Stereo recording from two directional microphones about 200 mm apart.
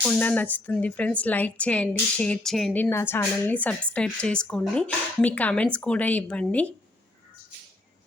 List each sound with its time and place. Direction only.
0.0 s speech: 10° left (ahead or behind)
2.9 s speech: 10° left (ahead or behind)